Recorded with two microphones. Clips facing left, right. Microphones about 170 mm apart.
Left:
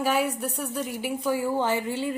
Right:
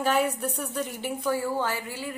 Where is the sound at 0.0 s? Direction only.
5° left (ahead or behind).